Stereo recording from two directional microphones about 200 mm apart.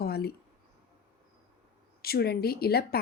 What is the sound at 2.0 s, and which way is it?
Speech, 50° left (ahead or behind).